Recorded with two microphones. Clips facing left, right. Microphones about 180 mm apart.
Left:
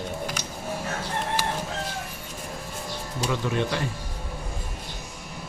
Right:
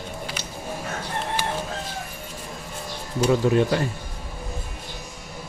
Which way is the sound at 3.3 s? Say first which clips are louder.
Right 7 dB; 40° right (ahead or behind).